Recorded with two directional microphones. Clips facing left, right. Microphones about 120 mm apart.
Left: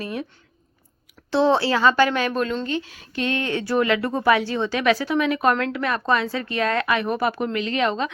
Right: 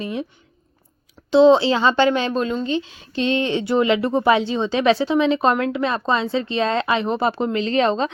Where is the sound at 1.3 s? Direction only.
20° right (ahead or behind).